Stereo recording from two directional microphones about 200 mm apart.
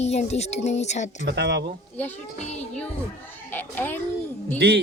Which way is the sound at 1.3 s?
55° right (ahead or behind).